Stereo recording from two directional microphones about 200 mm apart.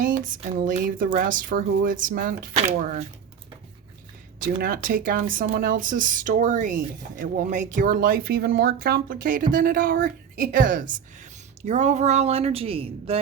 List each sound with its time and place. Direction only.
0.0 s speech: 40° right (ahead or behind)
4.4 s speech: 45° right (ahead or behind); by 13.1 s 30° right (ahead or behind)